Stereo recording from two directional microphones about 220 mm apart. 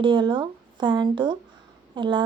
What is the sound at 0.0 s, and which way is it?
A woman's voice, 20° right (ahead or behind).